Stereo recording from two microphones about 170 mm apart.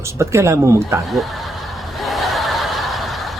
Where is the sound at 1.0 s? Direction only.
Centre (ahead or behind).